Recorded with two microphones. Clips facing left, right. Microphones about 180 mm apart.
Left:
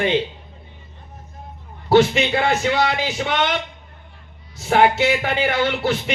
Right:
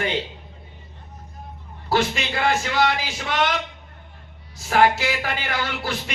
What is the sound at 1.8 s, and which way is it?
A man's voice, 25° left (ahead or behind).